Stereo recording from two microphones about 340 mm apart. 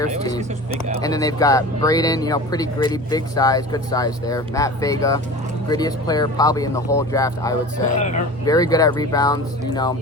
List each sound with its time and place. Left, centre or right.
0.2 s speech: centre
7.9 s speech: left
8.4 s speech: centre